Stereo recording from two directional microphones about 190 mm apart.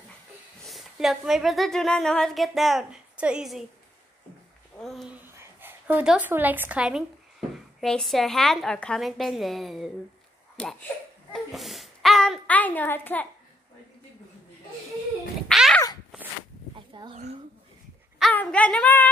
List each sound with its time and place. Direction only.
0.7 s a woman's voice: centre (ahead or behind)
4.7 s a woman's voice: centre (ahead or behind)
15.4 s a sound: centre (ahead or behind)
16.9 s a woman's voice: 25° right (ahead or behind)
18.2 s speech: 5° left (ahead or behind)